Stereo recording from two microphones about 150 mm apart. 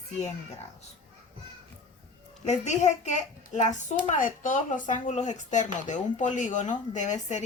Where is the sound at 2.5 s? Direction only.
50° left (ahead or behind).